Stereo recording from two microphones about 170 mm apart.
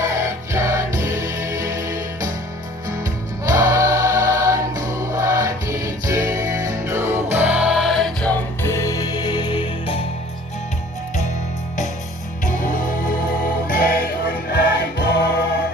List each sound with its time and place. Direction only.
0.0 s music: 20° right (ahead or behind); by 10.0 s 30° left (ahead or behind)
13.7 s music: 60° left (ahead or behind)